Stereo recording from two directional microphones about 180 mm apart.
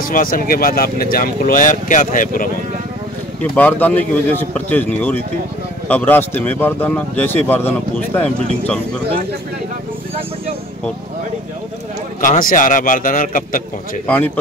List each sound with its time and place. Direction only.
0.1 s speech: 50° left (ahead or behind)
3.3 s speech: 10° left (ahead or behind)
12.2 s speech: 50° left (ahead or behind)
14.0 s speech: 10° left (ahead or behind)